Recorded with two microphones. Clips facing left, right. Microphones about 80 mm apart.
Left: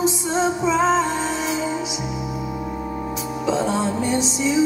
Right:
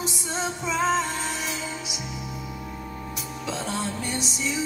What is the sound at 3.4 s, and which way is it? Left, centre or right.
Music, centre.